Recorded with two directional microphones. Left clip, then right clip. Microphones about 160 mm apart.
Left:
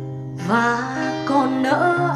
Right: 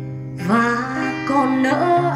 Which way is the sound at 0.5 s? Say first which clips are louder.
Right 1 dB; 15° left (ahead or behind).